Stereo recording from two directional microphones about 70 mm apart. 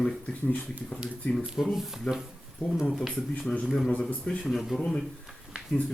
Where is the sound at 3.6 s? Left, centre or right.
Centre.